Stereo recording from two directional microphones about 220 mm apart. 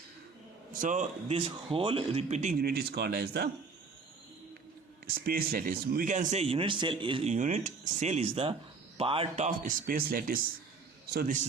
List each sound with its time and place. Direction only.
0.8 s a man's voice: 35° right (ahead or behind)
5.2 s a man's voice: 40° right (ahead or behind)